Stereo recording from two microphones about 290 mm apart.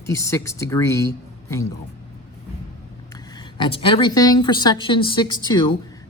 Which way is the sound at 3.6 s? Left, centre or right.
Centre.